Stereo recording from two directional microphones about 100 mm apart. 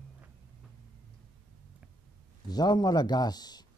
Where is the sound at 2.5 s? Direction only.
45° left (ahead or behind).